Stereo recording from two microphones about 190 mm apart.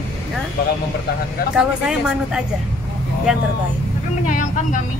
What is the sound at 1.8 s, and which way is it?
Speech, 5° right (ahead or behind).